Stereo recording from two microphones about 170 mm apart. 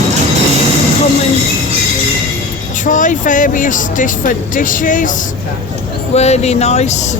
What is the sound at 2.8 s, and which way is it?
Speech, 50° left (ahead or behind).